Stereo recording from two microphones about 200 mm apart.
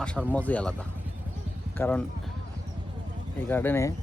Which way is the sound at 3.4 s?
10° left (ahead or behind).